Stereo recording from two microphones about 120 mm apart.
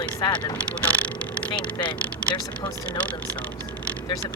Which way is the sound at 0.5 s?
10° left (ahead or behind).